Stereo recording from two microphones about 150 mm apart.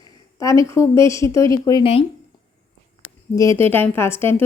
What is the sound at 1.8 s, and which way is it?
Speech, 40° left (ahead or behind).